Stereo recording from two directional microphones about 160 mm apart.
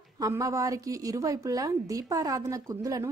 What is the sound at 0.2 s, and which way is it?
A woman's voice, 20° right (ahead or behind).